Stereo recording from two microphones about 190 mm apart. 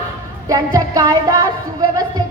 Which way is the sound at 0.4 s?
20° right (ahead or behind).